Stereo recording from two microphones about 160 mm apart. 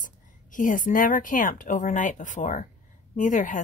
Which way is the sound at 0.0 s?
55° left (ahead or behind).